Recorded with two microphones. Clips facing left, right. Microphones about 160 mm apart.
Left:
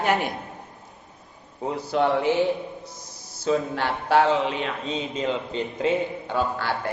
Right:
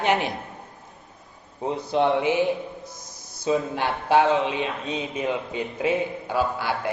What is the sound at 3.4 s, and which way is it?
Speech, 15° right (ahead or behind).